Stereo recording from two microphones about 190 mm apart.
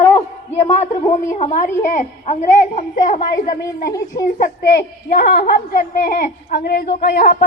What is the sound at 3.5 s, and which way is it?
A woman's voice, 55° left (ahead or behind).